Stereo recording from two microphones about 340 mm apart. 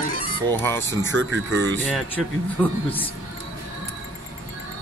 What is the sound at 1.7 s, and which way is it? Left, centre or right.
Speech, centre.